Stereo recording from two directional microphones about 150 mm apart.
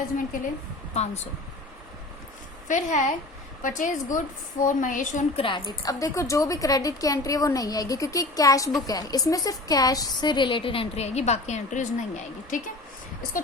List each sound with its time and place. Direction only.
0.9 s speech: 45° left (ahead or behind)
2.6 s a woman's voice: 55° left (ahead or behind)
5.4 s a woman's voice: 35° left (ahead or behind); by 12.6 s 60° left (ahead or behind)